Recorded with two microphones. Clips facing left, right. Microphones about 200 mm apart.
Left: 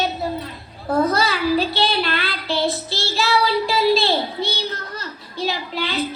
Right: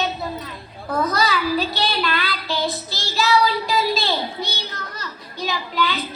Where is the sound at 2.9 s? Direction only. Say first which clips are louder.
Even; 40° right (ahead or behind).